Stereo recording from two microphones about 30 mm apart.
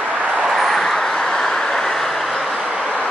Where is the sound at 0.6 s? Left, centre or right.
Centre.